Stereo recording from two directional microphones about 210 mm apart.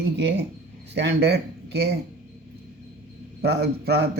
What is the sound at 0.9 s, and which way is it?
Speech, 50° right (ahead or behind).